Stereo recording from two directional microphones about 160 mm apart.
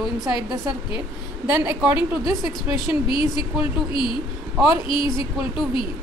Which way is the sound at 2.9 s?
30° left (ahead or behind).